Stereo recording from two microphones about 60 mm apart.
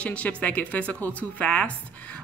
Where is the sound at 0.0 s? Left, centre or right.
Left.